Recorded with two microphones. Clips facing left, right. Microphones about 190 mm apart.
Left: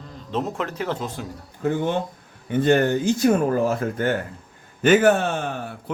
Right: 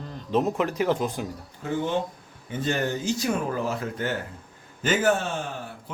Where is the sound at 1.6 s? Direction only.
50° left (ahead or behind).